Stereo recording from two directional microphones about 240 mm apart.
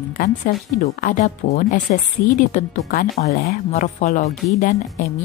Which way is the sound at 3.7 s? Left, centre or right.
Left.